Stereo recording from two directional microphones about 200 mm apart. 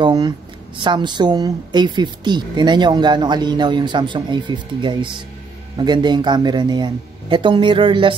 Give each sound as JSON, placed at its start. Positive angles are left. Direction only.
{"t": 0.0, "sound": "speech", "side_deg": -20}